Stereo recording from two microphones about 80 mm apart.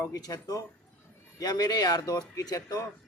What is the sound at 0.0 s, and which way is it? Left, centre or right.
A man's voice, left.